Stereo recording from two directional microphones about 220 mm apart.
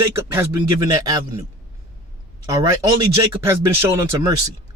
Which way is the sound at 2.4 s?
15° right (ahead or behind).